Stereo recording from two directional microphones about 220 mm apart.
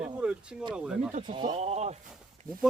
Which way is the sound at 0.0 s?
5° right (ahead or behind).